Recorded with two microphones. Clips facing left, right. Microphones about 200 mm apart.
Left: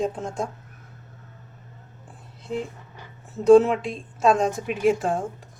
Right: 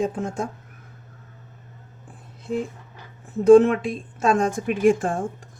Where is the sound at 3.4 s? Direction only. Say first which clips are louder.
Right 2 dB; 50° right (ahead or behind).